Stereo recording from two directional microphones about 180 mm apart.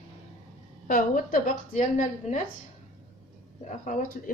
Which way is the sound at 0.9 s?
50° left (ahead or behind).